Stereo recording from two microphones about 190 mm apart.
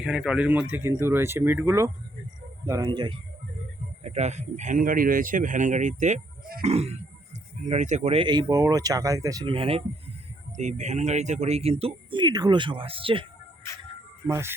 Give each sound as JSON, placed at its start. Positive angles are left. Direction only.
{"t": 0.0, "sound": "speech", "side_deg": -5}
{"t": 4.0, "sound": "speech", "side_deg": -35}
{"t": 14.3, "sound": "speech", "side_deg": -15}